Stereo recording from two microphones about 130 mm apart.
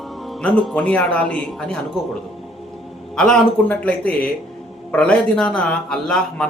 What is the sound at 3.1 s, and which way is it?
A man's voice, 5° left (ahead or behind).